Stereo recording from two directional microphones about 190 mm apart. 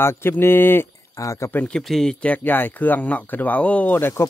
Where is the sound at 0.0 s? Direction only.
10° left (ahead or behind).